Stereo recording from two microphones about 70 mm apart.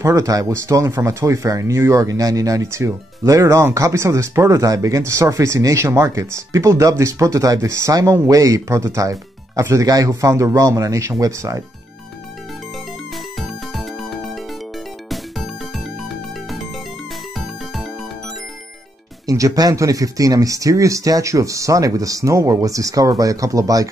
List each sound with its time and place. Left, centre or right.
0.0 s speech: right
13.1 s music: centre
19.2 s speech: right